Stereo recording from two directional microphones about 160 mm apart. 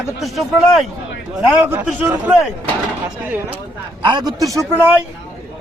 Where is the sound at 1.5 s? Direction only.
10° right (ahead or behind).